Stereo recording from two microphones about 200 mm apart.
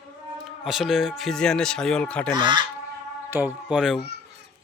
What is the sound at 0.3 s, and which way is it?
A man's voice, centre (ahead or behind).